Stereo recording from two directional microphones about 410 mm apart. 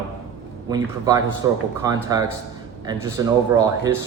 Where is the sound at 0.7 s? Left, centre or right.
Centre.